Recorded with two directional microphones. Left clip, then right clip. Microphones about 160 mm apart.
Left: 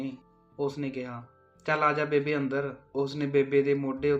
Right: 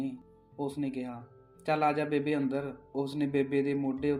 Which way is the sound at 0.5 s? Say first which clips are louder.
Left 3 dB; 35° right (ahead or behind).